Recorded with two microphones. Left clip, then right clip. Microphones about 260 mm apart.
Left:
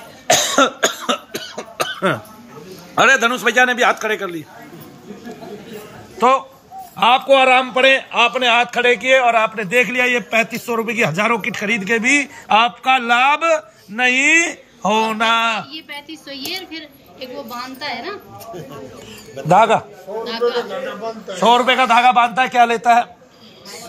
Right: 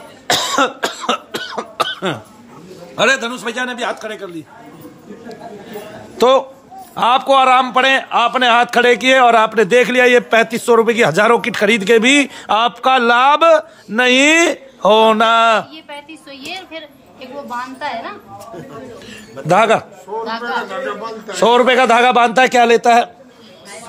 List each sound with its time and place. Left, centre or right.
0.3 s cough: centre
3.0 s a man's voice: centre
6.1 s a man's voice: right
19.4 s a man's voice: centre